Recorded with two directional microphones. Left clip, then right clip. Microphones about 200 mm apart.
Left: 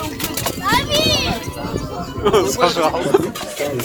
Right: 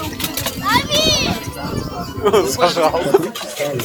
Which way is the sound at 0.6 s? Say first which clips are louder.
Right 1 dB; 50° left (ahead or behind).